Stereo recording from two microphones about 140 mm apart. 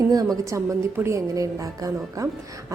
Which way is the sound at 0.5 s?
20° right (ahead or behind).